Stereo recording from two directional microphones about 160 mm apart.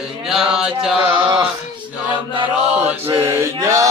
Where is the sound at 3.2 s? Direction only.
15° right (ahead or behind).